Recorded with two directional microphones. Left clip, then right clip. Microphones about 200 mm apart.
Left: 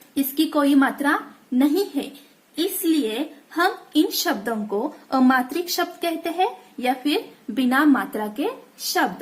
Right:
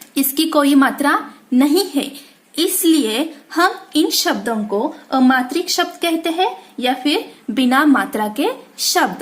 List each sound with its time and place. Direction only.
0.1 s a woman's voice: 20° right (ahead or behind)
4.7 s a woman's voice: 5° left (ahead or behind); by 9.2 s 15° right (ahead or behind)